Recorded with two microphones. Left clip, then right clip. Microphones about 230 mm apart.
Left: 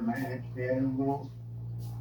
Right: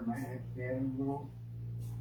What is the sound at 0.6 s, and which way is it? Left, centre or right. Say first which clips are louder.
Speech: left 7 dB; left.